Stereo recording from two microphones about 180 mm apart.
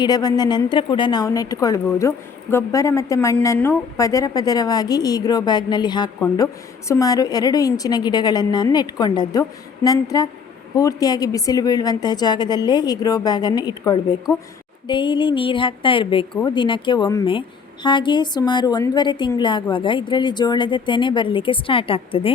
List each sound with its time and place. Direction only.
0.0 s a woman's voice: 20° left (ahead or behind)